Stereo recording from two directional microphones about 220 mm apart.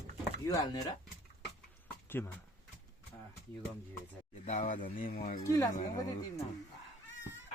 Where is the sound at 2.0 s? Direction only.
10° left (ahead or behind).